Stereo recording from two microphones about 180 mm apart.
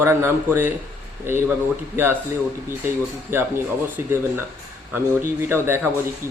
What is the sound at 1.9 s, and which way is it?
Speech, 10° right (ahead or behind).